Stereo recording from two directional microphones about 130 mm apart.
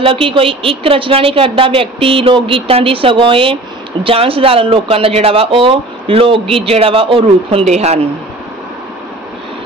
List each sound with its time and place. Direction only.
0.0 s speech: 40° right (ahead or behind)